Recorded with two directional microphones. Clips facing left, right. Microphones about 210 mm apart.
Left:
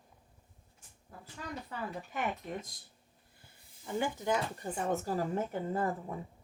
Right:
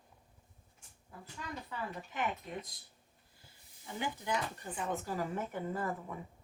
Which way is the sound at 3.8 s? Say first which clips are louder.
Left 6 dB; 45° left (ahead or behind).